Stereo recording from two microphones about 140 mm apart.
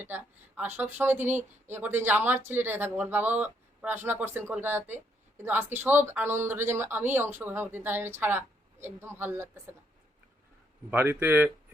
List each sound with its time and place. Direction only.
0.0 s speech: 10° right (ahead or behind)
10.9 s speech: 15° right (ahead or behind)